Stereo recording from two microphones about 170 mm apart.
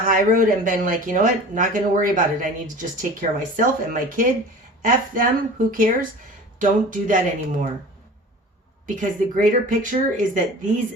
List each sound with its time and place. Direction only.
0.1 s speech: 55° right (ahead or behind)
9.0 s speech: 50° right (ahead or behind)